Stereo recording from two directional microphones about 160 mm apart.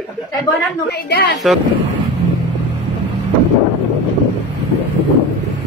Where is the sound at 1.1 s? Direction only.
90° left.